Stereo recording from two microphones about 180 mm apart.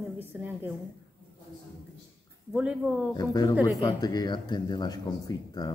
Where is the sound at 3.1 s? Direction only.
20° left (ahead or behind).